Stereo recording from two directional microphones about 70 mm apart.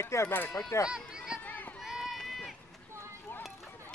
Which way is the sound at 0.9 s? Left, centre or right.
Centre.